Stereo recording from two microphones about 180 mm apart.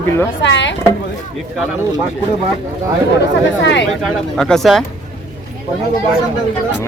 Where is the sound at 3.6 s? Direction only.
80° left.